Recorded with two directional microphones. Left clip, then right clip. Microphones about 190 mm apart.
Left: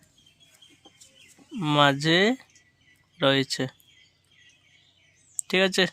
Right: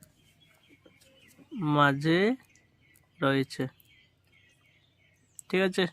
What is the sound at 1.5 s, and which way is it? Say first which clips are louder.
Speech: left 4 dB; 15° left (ahead or behind).